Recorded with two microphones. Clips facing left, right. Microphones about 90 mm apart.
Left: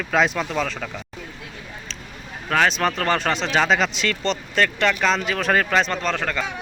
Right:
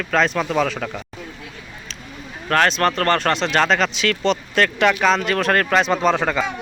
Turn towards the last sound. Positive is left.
turn(degrees=-15)  # may be behind; listen again after turning